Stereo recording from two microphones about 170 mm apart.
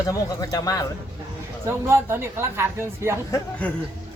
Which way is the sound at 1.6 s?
15° right (ahead or behind).